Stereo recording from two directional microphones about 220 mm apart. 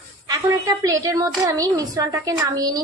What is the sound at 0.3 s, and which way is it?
A woman's voice, 15° right (ahead or behind).